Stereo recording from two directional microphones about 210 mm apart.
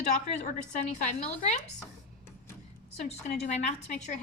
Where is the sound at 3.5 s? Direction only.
30° left (ahead or behind).